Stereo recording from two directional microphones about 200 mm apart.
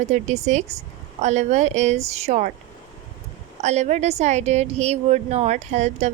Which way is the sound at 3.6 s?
35° right (ahead or behind).